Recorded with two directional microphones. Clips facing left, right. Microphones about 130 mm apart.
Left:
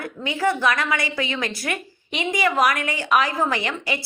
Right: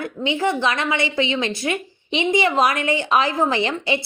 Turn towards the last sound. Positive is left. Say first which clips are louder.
# right 4 dB
turn(degrees=-30)  # may be behind; listen again after turning